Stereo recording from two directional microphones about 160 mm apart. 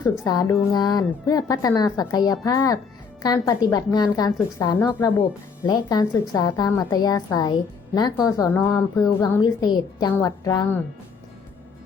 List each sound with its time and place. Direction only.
0.3 s a woman's voice: 25° left (ahead or behind)